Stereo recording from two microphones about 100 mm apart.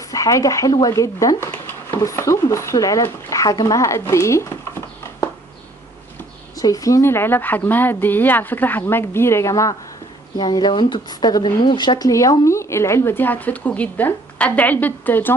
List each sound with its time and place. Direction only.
0.0 s speech: 35° left (ahead or behind)
6.5 s a woman's voice: 35° left (ahead or behind)
10.3 s speech: 45° left (ahead or behind)
12.1 s a woman's voice: 35° left (ahead or behind); by 15.3 s 20° left (ahead or behind)